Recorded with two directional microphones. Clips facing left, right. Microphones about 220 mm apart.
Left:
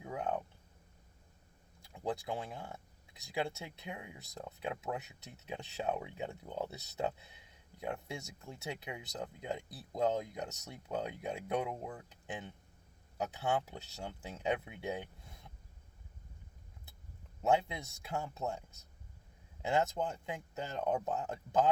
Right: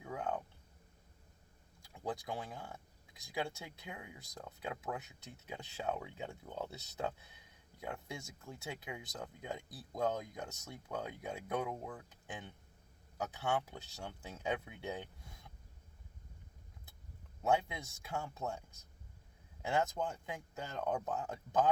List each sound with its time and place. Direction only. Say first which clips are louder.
0.0 s a sound: left 2 dB; 20° left (ahead or behind)
2.0 s speech: left 3 dB; 20° left (ahead or behind)
13.1 s speech: left 2 dB; 20° left (ahead or behind)
18.0 s speech: left 2 dB; 20° left (ahead or behind)
19.6 s speech: left 2 dB; 20° left (ahead or behind)